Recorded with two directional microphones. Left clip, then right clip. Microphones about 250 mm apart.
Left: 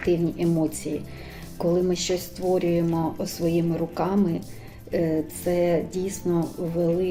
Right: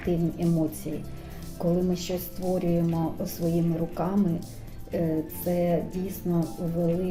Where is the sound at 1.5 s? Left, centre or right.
Centre.